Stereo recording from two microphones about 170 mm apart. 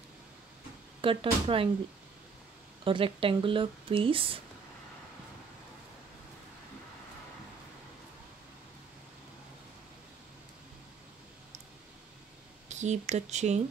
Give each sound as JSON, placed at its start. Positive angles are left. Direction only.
{"t": 1.0, "sound": "speech", "side_deg": -30}
{"t": 2.8, "sound": "speech", "side_deg": -30}
{"t": 12.6, "sound": "speech", "side_deg": -45}